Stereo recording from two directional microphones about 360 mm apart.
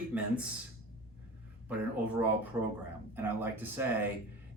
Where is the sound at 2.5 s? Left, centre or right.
Centre.